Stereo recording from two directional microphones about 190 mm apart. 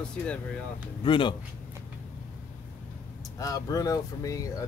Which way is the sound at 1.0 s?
25° left (ahead or behind).